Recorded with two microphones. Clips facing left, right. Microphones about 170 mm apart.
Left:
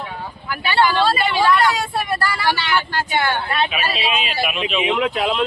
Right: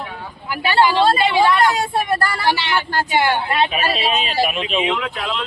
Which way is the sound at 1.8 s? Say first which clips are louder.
Right 3 dB; 45° right (ahead or behind).